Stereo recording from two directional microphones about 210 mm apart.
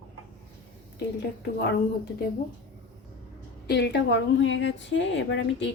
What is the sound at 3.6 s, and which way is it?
A woman's voice, 50° left (ahead or behind).